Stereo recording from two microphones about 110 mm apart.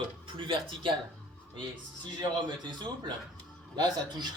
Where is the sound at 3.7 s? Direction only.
40° right (ahead or behind).